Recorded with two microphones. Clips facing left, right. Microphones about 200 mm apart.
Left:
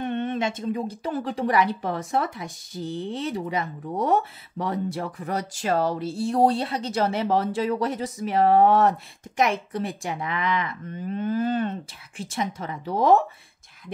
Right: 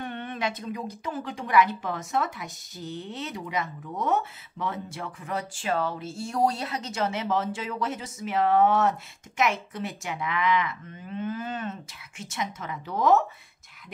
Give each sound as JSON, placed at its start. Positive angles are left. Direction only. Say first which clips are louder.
{"t": 0.0, "sound": "speech", "louder": "left 6 dB", "side_deg": 25}